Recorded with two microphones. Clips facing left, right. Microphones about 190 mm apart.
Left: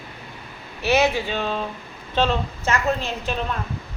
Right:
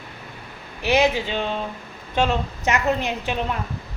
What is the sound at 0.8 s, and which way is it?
A woman's voice, 15° right (ahead or behind).